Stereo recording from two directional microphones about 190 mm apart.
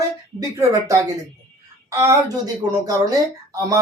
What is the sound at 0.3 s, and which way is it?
A woman's voice, 20° right (ahead or behind).